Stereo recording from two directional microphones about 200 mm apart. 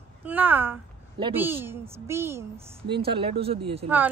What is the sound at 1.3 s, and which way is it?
A child's voice, 10° right (ahead or behind).